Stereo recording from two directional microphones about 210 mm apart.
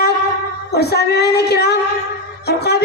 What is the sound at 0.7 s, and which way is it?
A woman's voice, 50° left (ahead or behind).